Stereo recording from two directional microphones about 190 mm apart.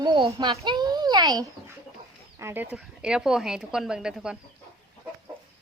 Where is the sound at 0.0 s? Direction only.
25° right (ahead or behind).